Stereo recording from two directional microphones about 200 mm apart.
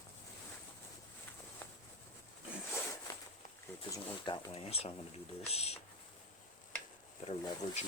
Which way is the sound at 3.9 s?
25° left (ahead or behind).